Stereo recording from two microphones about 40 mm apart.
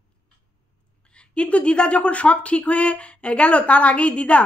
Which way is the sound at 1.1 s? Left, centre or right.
Left.